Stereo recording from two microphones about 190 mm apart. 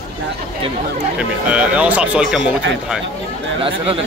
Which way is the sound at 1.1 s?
5° right (ahead or behind).